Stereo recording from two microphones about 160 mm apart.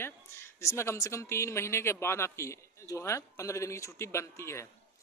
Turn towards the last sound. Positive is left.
turn(degrees=15)  # may be behind; listen again after turning